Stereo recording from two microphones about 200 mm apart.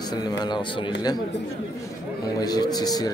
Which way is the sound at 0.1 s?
20° left (ahead or behind).